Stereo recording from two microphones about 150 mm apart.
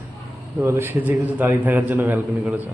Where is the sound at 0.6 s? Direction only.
15° right (ahead or behind).